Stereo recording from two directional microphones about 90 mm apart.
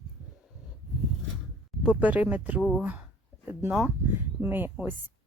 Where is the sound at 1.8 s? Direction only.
15° right (ahead or behind).